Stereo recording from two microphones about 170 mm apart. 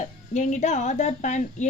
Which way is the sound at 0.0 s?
45° left (ahead or behind).